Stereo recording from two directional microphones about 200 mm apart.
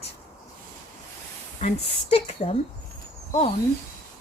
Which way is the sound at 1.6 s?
35° left (ahead or behind).